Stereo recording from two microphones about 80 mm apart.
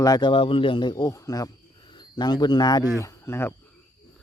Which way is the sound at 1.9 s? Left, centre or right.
Left.